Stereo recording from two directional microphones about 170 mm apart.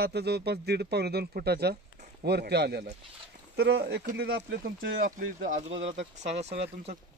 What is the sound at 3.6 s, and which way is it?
Speech, 90° right.